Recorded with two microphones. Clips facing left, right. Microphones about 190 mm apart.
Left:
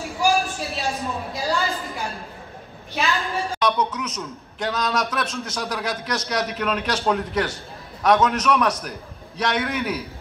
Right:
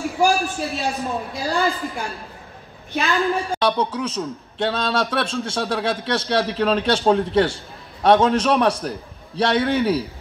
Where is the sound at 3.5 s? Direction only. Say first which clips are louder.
Right 2 dB; 30° right (ahead or behind).